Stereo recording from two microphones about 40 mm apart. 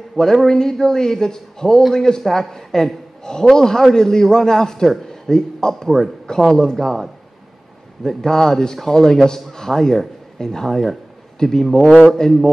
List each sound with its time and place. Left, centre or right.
0.2 s a man's voice: centre
2.0 s a man's voice: centre
8.0 s a man's voice: centre